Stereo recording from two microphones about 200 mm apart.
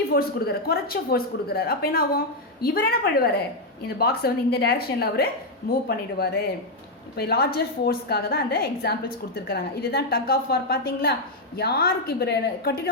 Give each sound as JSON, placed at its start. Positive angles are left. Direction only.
{"t": 0.1, "sound": "a woman's voice", "side_deg": 50}